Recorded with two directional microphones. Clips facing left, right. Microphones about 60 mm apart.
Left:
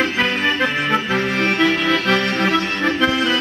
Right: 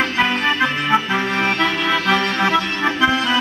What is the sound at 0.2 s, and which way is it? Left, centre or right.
Accordion, centre.